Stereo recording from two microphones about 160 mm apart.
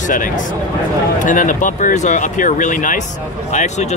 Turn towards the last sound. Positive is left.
turn(degrees=45)  # may be behind; listen again after turning